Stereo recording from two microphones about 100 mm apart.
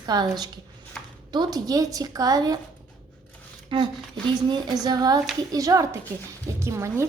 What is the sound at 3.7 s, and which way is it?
Speech, 55° right (ahead or behind).